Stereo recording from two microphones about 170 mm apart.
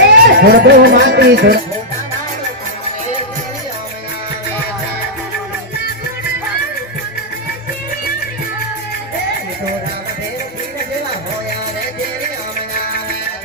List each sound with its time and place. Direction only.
0.1 s speech: 80° right